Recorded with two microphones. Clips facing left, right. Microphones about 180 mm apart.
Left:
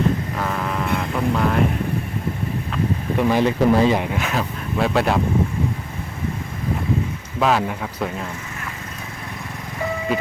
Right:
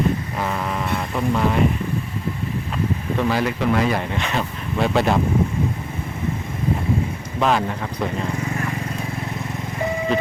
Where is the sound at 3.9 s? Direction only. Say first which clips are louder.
Left 2 dB; 10° left (ahead or behind).